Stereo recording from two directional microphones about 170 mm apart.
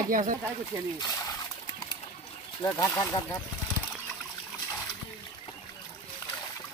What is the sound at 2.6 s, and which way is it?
Speech, 20° left (ahead or behind).